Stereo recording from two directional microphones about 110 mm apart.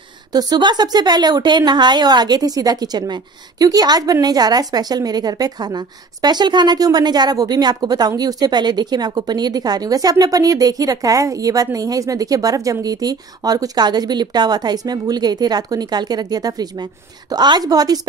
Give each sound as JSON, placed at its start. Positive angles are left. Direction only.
{"t": 0.3, "sound": "a woman's voice", "side_deg": -40}